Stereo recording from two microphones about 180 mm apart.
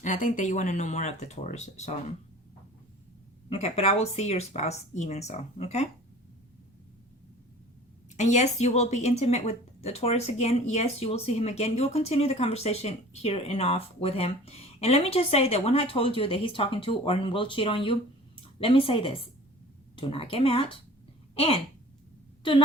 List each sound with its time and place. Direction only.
0.0 s a woman's voice: 45° left (ahead or behind)
3.5 s a woman's voice: 35° left (ahead or behind)
8.1 s a woman's voice: 40° left (ahead or behind)
21.3 s a sound: 30° left (ahead or behind)